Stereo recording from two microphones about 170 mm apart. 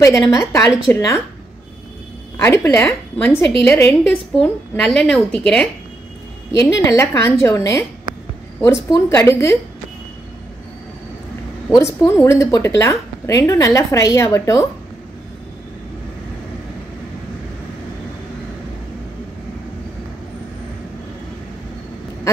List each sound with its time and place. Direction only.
0.0 s a woman's voice: 20° left (ahead or behind)
2.3 s a woman's voice: 15° left (ahead or behind)
6.8 s a woman's voice: 15° left (ahead or behind)
11.7 s a woman's voice: 15° left (ahead or behind)